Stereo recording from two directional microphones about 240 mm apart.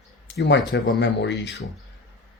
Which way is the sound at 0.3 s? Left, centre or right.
Left.